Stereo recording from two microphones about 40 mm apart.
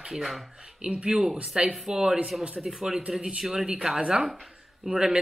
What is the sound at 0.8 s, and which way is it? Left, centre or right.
A man's voice, right.